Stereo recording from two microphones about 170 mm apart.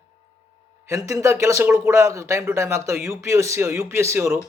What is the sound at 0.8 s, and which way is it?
Speech, 15° right (ahead or behind).